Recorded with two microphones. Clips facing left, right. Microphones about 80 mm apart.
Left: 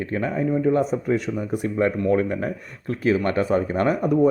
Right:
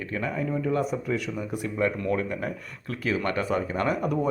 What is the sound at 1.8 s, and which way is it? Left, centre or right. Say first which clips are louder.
Speech: left 6 dB; left.